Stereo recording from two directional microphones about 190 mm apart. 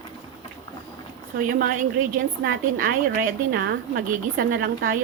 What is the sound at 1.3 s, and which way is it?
A woman's voice, 50° right (ahead or behind).